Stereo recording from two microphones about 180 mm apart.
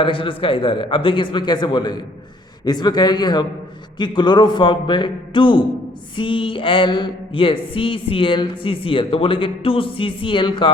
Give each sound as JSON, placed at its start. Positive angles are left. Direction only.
{"t": 0.0, "sound": "speech", "side_deg": 30}